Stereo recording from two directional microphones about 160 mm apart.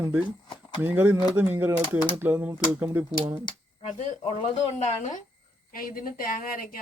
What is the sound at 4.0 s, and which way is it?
Speech, 40° left (ahead or behind).